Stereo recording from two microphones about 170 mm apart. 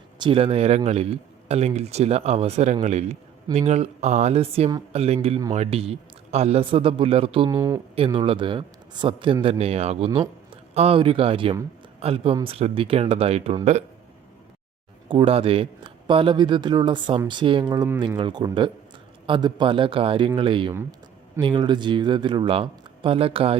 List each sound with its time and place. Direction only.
0.2 s a man's voice: 30° right (ahead or behind)
15.1 s a man's voice: 35° right (ahead or behind)